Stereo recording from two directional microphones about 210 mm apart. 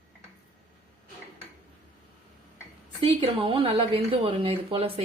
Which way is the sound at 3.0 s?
25° right (ahead or behind).